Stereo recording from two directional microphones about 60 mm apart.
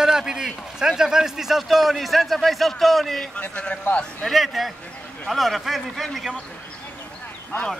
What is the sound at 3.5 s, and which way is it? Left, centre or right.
Speech, left.